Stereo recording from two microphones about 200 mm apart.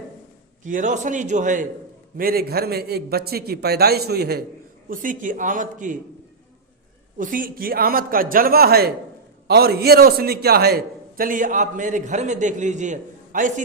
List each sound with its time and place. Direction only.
0.6 s a man's voice: 40° right (ahead or behind)
4.9 s a man's voice: 40° right (ahead or behind)
7.2 s a man's voice: 45° right (ahead or behind)